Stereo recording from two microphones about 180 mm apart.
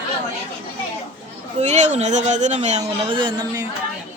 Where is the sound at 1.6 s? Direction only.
40° right (ahead or behind).